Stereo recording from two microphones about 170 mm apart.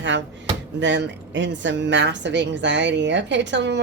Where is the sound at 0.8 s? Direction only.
90° right.